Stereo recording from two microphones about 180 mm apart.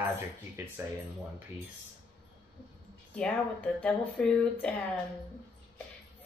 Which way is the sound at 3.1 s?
5° left (ahead or behind).